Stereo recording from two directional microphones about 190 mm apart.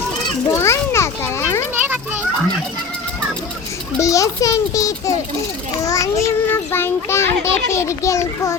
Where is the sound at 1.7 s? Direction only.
10° right (ahead or behind).